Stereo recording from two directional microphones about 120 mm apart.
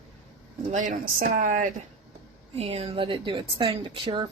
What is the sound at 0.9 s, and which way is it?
Speech, 90° right.